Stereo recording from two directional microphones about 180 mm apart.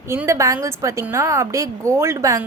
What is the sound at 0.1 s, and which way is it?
A woman's voice, 15° right (ahead or behind).